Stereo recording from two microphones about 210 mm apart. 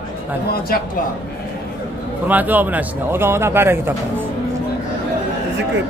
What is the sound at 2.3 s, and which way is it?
A man's voice, 10° right (ahead or behind).